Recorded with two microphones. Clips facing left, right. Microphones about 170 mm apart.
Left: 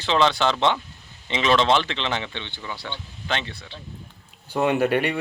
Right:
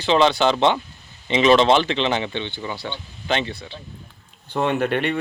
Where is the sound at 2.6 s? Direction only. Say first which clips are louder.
Right 5 dB; 20° right (ahead or behind).